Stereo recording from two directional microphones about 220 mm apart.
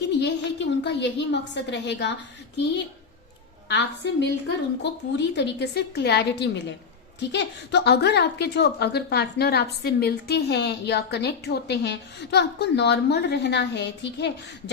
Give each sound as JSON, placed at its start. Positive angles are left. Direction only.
{"t": 0.2, "sound": "a woman's voice", "side_deg": 55}
{"t": 3.7, "sound": "a woman's voice", "side_deg": 55}